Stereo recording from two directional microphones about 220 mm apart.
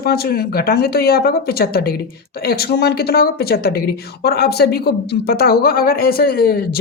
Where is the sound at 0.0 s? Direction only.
45° left (ahead or behind).